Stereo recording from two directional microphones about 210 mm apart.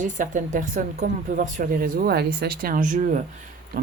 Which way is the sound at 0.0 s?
35° right (ahead or behind).